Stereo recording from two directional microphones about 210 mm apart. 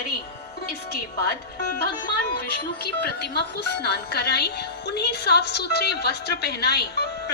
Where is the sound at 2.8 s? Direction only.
50° left (ahead or behind).